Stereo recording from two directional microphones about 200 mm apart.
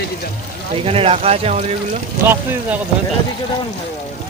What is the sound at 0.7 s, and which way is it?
Speech, 30° right (ahead or behind).